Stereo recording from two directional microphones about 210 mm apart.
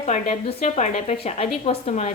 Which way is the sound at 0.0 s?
35° left (ahead or behind).